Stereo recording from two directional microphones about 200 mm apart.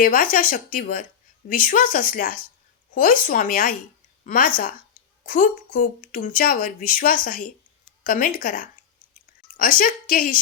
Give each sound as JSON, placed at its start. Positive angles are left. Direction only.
{"t": 0.0, "sound": "a woman's voice", "side_deg": 45}